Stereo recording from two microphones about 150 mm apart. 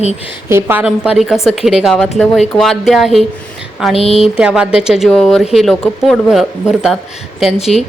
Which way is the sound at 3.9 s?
40° left (ahead or behind).